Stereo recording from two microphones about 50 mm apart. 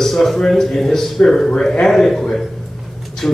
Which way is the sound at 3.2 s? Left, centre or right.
Centre.